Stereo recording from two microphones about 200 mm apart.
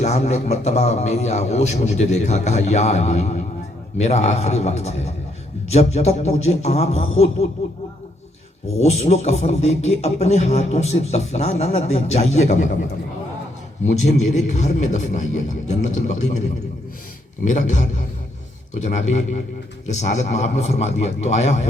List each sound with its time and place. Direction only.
0.0 s a man's voice: 35° left (ahead or behind)
8.8 s a man's voice: 30° left (ahead or behind)
13.8 s a man's voice: 35° left (ahead or behind)
17.4 s a man's voice: 35° left (ahead or behind)